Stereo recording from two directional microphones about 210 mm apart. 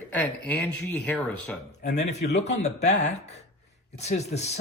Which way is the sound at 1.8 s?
35° left (ahead or behind).